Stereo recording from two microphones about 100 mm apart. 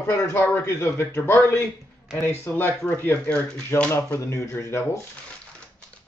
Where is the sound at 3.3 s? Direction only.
10° left (ahead or behind).